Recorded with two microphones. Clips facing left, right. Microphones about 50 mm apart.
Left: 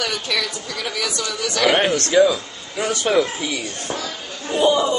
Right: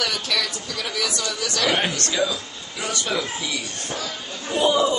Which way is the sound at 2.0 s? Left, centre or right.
Left.